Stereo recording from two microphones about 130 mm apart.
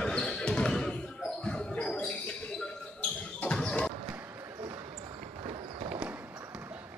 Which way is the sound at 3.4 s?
5° left (ahead or behind).